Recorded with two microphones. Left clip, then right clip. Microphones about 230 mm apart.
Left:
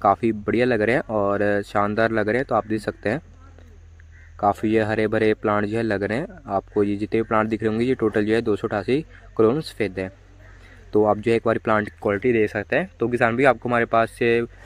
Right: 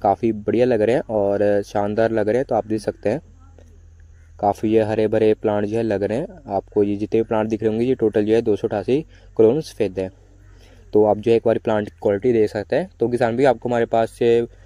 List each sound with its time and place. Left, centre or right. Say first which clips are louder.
0.0 s speech: right 1 dB; centre
1.0 s speech: right 2 dB; left
1.3 s speech: right 3 dB; centre
4.4 s speech: right 2 dB; centre
11.1 s speech: right 4 dB; centre